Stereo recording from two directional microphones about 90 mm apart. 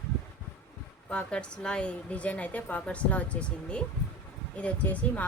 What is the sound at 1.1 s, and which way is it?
A woman's voice, 10° left (ahead or behind).